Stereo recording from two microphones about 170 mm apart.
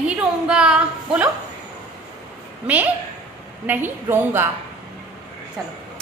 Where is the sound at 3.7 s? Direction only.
10° right (ahead or behind).